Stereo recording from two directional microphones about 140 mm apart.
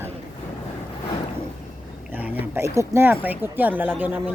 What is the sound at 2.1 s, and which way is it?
Speech, 15° right (ahead or behind).